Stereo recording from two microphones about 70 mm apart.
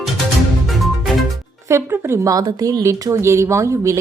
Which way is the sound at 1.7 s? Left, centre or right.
Right.